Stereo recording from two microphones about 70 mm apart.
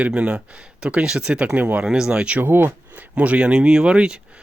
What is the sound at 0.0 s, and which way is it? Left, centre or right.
Speech, centre.